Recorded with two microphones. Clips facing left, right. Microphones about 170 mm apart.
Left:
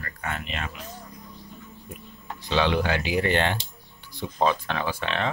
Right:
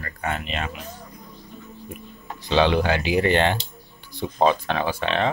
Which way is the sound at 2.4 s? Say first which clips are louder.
Right 4 dB; 25° right (ahead or behind).